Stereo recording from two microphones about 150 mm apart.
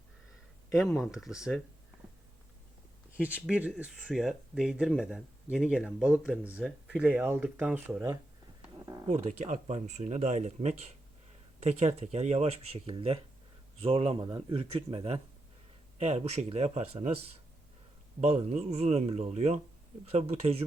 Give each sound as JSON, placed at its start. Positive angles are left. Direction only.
{"t": 0.7, "sound": "speech", "side_deg": 0}
{"t": 3.1, "sound": "speech", "side_deg": -10}
{"t": 9.0, "sound": "speech", "side_deg": -55}
{"t": 18.2, "sound": "speech", "side_deg": -45}